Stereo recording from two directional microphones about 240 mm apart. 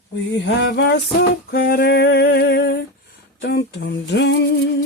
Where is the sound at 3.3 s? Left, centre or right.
Left.